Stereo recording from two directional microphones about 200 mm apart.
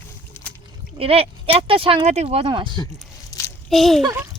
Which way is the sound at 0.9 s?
30° right (ahead or behind).